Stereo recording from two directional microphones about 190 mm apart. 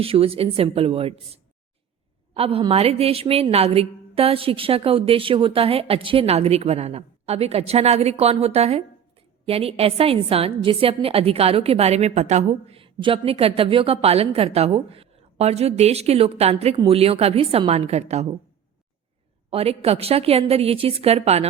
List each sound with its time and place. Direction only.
0.0 s a woman's voice: 30° right (ahead or behind)
19.5 s a woman's voice: 30° right (ahead or behind)